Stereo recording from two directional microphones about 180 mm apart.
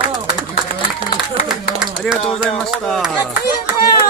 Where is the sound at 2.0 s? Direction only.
5° left (ahead or behind).